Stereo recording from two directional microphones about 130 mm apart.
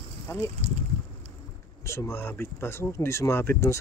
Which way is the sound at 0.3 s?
20° left (ahead or behind).